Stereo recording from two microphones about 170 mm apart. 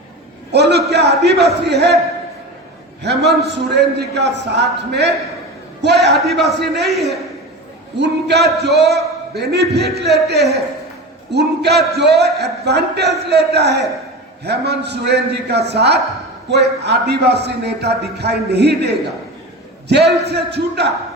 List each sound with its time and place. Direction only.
0.5 s a sound: 75° right (ahead or behind)
1.2 s a man's voice: 75° right (ahead or behind)
3.0 s a man's voice: 80° right
6.1 s speech: centre (ahead or behind)
6.6 s a man's voice: 75° right (ahead or behind)
6.9 s speech: centre (ahead or behind)
7.9 s a man's voice: 85° right